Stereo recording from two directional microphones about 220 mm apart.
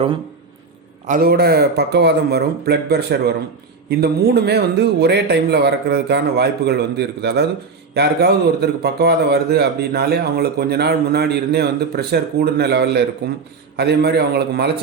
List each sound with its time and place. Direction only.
1.0 s a man's voice: 40° right (ahead or behind)